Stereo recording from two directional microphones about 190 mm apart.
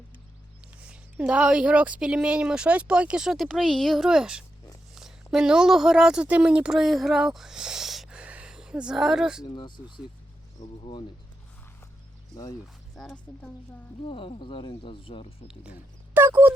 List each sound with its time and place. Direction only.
0.8 s a woman's voice: 5° right (ahead or behind)
9.6 s speech: 25° left (ahead or behind)
10.6 s speech: 40° left (ahead or behind)
13.0 s speech: 5° left (ahead or behind)
14.1 s speech: 30° left (ahead or behind)
16.1 s speech: 10° right (ahead or behind)